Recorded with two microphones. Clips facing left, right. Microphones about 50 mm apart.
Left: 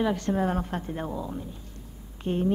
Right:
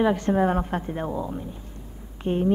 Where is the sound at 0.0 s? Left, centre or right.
Right.